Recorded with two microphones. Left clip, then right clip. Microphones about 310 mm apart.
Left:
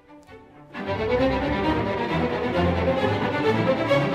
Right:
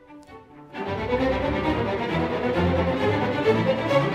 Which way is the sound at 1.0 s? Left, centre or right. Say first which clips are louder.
Left 2 dB; centre.